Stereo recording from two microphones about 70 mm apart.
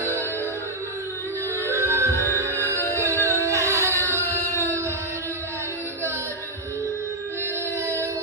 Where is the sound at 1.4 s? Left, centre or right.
Right.